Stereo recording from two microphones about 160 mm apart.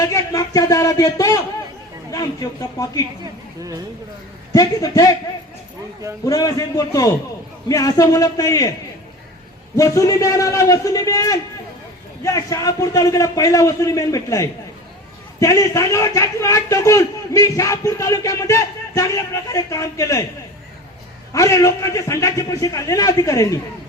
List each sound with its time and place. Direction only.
0.0 s a man's voice: 20° left (ahead or behind)
4.5 s a man's voice: 20° left (ahead or behind)
6.2 s a man's voice: 20° left (ahead or behind)
9.7 s a man's voice: 20° left (ahead or behind)
21.3 s a man's voice: 20° left (ahead or behind)